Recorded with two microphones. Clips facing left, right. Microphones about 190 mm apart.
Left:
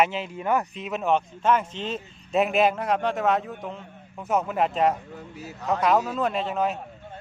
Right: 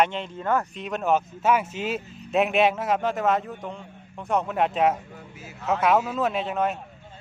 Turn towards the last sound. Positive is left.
turn(degrees=0)  # may be behind; listen again after turning